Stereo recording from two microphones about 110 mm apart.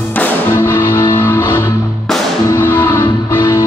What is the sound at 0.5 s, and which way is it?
Music, 25° left (ahead or behind).